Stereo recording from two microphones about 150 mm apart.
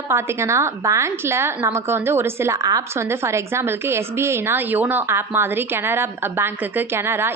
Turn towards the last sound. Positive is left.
turn(degrees=-15)  # may be behind; listen again after turning